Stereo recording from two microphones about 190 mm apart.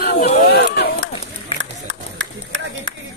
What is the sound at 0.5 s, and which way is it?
Run, 55° left (ahead or behind).